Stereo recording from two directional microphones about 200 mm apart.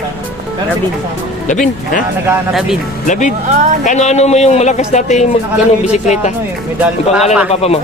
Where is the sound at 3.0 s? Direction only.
40° left (ahead or behind).